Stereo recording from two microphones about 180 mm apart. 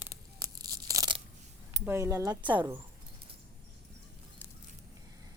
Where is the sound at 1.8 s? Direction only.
15° right (ahead or behind).